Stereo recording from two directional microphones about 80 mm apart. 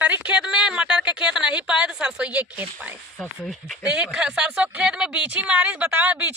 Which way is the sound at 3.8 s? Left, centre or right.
Centre.